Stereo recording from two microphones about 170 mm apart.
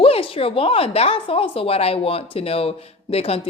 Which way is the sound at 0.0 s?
35° left (ahead or behind).